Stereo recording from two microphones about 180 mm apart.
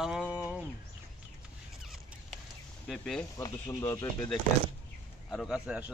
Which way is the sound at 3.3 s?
20° left (ahead or behind).